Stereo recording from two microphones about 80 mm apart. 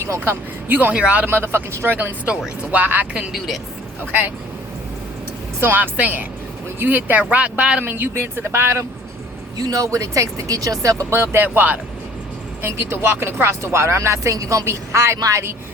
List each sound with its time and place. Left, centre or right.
0.3 s speech: right
2.3 s speech: centre
2.7 s speech: right
3.3 s a woman's voice: centre
4.0 s speech: right
5.5 s speech: right
9.6 s speech: right
11.1 s speech: right